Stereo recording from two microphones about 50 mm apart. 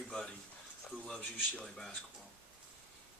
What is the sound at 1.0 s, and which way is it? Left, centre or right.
Speech, centre.